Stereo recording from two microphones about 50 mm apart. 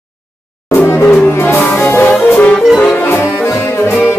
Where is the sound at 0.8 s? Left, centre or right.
Left.